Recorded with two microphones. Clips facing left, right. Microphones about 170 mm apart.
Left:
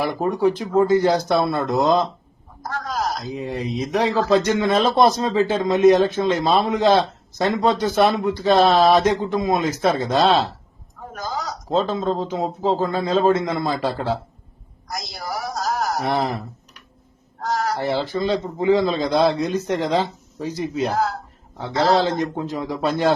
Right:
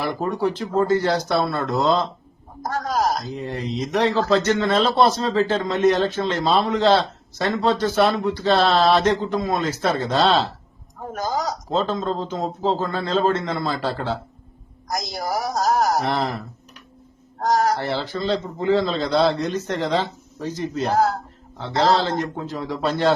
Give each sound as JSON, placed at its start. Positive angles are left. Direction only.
{"t": 0.0, "sound": "a man's voice", "side_deg": 10}
{"t": 2.6, "sound": "a man's voice", "side_deg": -45}
{"t": 3.3, "sound": "a man's voice", "side_deg": 10}
{"t": 11.1, "sound": "a sound", "side_deg": -45}
{"t": 11.7, "sound": "a man's voice", "side_deg": 10}
{"t": 14.8, "sound": "a sound", "side_deg": -40}
{"t": 16.0, "sound": "a man's voice", "side_deg": 10}
{"t": 17.4, "sound": "a sound", "side_deg": -45}
{"t": 17.7, "sound": "a man's voice", "side_deg": 15}
{"t": 20.9, "sound": "a man's voice", "side_deg": -40}
{"t": 22.2, "sound": "a man's voice", "side_deg": 15}